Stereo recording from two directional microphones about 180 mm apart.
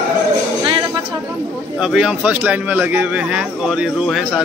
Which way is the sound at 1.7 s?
5° right (ahead or behind).